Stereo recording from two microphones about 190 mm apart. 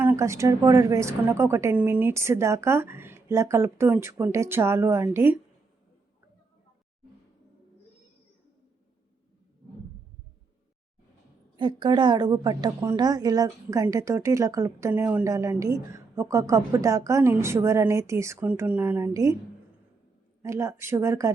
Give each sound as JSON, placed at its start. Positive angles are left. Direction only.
{"t": 0.0, "sound": "a woman's voice", "side_deg": -10}
{"t": 11.5, "sound": "a woman's voice", "side_deg": -25}
{"t": 20.4, "sound": "a woman's voice", "side_deg": -15}